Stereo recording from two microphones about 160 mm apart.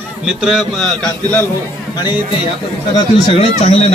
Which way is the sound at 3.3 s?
40° left (ahead or behind).